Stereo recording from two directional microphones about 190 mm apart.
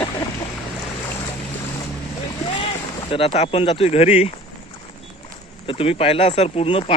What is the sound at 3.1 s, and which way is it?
Speech, 30° left (ahead or behind).